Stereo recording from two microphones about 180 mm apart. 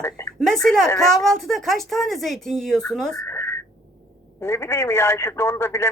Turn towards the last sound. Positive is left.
turn(degrees=15)  # may be behind; listen again after turning